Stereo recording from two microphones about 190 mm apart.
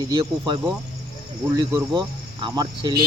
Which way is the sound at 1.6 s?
25° right (ahead or behind).